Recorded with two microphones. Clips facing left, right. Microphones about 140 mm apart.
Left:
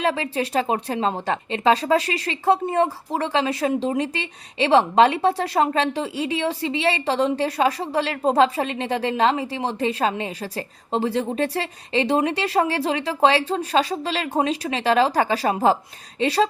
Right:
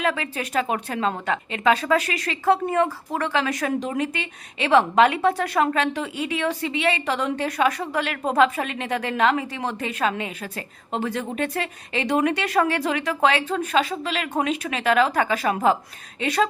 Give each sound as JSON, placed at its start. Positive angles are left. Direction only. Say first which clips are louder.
{"t": 0.0, "sound": "a woman's voice", "louder": "left 3 dB", "side_deg": 30}